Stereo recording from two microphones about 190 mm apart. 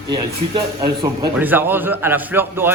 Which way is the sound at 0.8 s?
20° right (ahead or behind).